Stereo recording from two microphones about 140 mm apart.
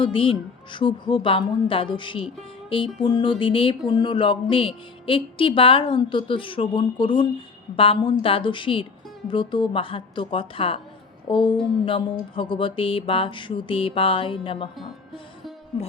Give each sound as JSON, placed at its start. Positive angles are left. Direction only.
{"t": 0.0, "sound": "a woman's voice", "side_deg": 40}